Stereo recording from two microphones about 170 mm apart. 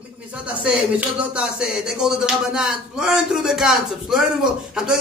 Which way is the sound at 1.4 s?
5° right (ahead or behind).